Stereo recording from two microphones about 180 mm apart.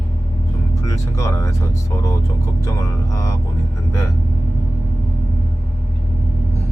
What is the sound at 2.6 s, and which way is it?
Speech, 15° left (ahead or behind).